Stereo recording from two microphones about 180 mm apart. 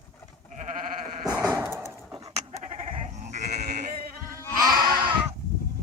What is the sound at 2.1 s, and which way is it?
Goat, 25° right (ahead or behind).